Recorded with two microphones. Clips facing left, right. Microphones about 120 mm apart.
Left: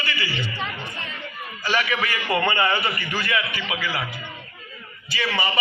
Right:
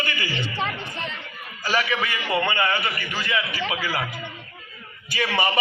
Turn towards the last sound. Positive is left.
turn(degrees=-50)  # may be behind; listen again after turning